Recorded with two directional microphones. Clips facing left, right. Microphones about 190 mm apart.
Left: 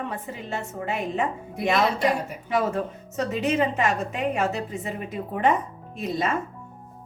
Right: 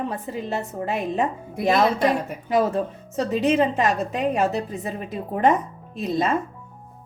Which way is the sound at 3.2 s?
35° right (ahead or behind).